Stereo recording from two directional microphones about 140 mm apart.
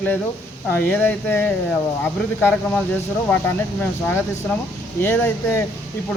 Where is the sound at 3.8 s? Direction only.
15° left (ahead or behind).